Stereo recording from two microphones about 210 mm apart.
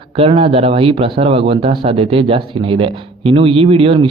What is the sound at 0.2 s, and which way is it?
Speech, 25° right (ahead or behind).